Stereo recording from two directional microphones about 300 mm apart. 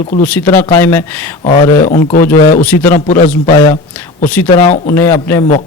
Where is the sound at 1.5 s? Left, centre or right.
Left.